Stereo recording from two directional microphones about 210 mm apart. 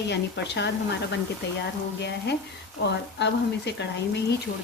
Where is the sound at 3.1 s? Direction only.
55° left (ahead or behind).